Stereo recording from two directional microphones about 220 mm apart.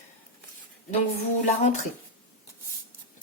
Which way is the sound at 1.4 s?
30° left (ahead or behind).